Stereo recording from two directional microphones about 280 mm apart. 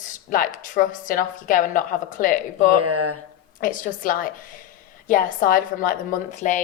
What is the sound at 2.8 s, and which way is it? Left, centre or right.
Speech, right.